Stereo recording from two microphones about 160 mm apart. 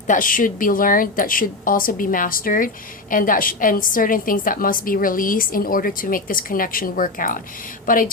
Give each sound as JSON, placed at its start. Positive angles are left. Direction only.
{"t": 0.1, "sound": "a woman's voice", "side_deg": 55}